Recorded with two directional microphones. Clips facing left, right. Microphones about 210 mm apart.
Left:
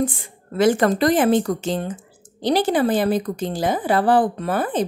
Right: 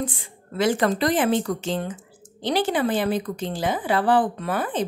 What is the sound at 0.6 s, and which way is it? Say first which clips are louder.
A woman's voice: left 4 dB; 50° left (ahead or behind).